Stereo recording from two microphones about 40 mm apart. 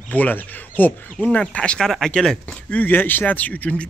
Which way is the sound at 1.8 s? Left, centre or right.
Centre.